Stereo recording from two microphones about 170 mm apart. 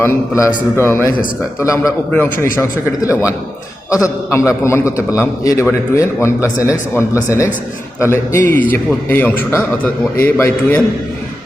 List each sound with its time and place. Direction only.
0.0 s a man's voice: 15° left (ahead or behind)
8.0 s a man's voice: 15° left (ahead or behind)